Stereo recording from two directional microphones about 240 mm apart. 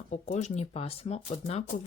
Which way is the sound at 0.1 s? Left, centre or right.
Left.